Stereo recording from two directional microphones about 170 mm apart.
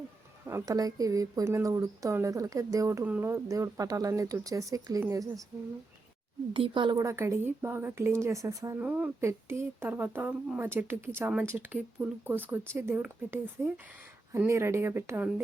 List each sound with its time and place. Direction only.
0.4 s speech: 20° right (ahead or behind)
6.5 s a woman's voice: 30° right (ahead or behind)